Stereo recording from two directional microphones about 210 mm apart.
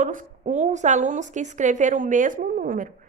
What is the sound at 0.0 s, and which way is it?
A woman's voice, 40° right (ahead or behind).